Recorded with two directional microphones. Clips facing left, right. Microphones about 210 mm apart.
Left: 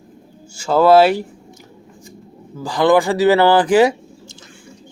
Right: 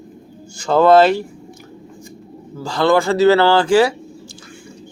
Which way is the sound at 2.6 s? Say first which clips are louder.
Left 1 dB; 15° left (ahead or behind).